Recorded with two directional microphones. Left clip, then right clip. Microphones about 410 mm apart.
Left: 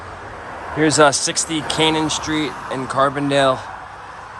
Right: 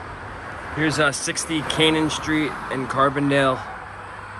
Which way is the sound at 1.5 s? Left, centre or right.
Left.